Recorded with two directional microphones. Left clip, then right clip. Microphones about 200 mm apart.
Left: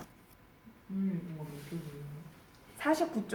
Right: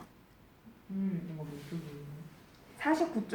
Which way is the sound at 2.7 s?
40° left (ahead or behind).